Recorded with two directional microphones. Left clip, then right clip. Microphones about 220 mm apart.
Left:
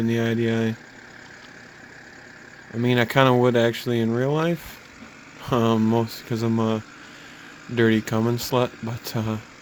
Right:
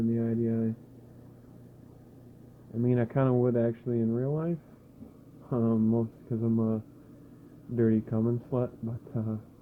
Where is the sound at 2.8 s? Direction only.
35° left (ahead or behind).